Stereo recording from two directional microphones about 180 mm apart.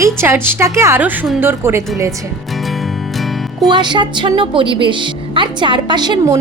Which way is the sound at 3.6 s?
25° right (ahead or behind).